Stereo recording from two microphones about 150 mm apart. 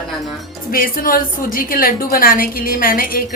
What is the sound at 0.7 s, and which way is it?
A woman's voice, 70° left (ahead or behind).